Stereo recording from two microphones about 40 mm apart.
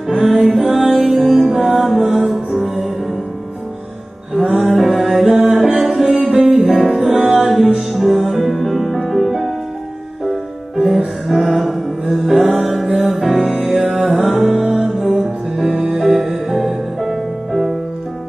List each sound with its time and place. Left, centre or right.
0.2 s music: centre
4.3 s music: centre
14.1 s music: centre